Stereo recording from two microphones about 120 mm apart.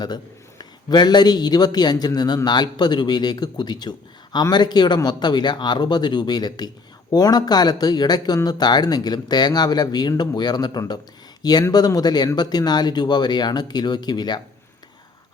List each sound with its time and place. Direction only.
0.6 s a man's voice: 35° left (ahead or behind)